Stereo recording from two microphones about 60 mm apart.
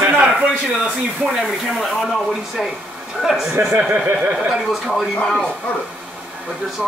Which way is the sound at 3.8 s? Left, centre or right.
Centre.